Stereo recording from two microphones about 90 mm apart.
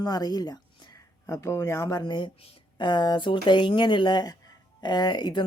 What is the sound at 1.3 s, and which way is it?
Speech, 35° left (ahead or behind).